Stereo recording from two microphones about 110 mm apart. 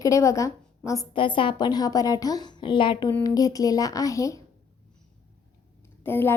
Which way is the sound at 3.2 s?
35° left (ahead or behind).